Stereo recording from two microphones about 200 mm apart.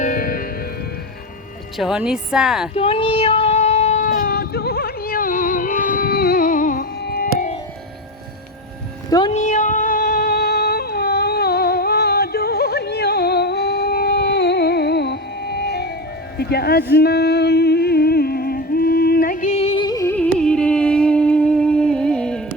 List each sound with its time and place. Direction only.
0.0 s music: 45° left (ahead or behind)
1.8 s a woman's voice: 5° right (ahead or behind)
2.7 s child singing: 30° left (ahead or behind)
9.0 s music: 20° left (ahead or behind)
9.3 s a sound: 35° left (ahead or behind); by 15.9 s 55° left (ahead or behind)
16.4 s speech: 50° left (ahead or behind)
16.9 s music: 55° left (ahead or behind); by 22.4 s 5° left (ahead or behind)